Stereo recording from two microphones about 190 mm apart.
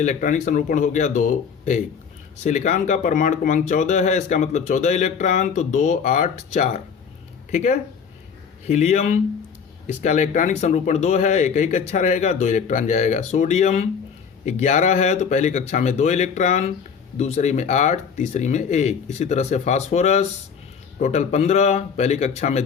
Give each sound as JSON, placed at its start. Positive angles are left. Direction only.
{"t": 0.0, "sound": "speech", "side_deg": 40}